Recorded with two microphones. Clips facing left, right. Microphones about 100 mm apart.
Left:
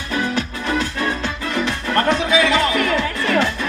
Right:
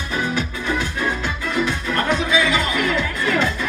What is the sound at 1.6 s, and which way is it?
Music, 70° left (ahead or behind).